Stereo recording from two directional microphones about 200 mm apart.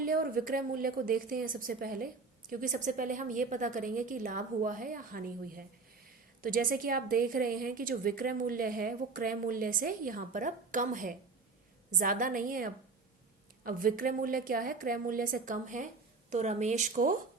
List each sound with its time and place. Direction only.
0.0 s a woman's voice: 45° right (ahead or behind)